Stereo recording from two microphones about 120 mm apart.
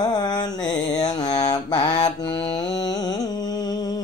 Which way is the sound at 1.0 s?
35° left (ahead or behind).